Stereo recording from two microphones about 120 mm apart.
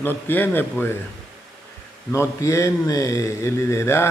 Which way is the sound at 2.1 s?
25° left (ahead or behind).